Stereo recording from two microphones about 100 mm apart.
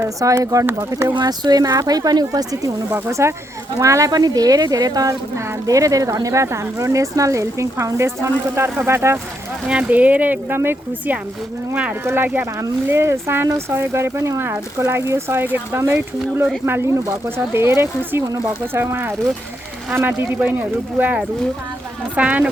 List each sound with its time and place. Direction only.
0.2 s speech: 35° right (ahead or behind)
1.1 s speech: 40° right (ahead or behind)
2.9 s speech: 30° right (ahead or behind)
9.6 s speech: 10° right (ahead or behind)